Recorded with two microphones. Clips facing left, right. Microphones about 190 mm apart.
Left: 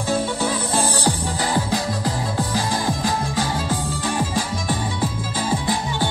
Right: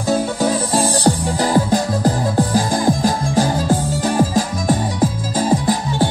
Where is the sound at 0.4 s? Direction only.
40° right (ahead or behind).